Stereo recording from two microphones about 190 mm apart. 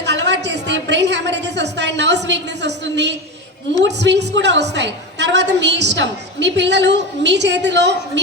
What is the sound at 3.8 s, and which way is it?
A woman's voice, 65° right (ahead or behind).